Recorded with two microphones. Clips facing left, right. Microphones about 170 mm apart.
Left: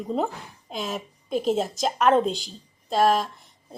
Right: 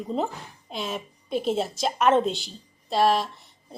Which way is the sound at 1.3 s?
40° left (ahead or behind).